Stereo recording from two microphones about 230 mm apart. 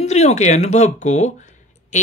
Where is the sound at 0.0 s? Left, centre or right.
Left.